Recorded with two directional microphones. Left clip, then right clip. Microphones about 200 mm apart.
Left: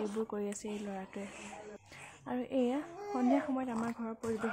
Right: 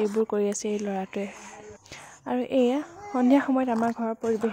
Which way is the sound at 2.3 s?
35° right (ahead or behind).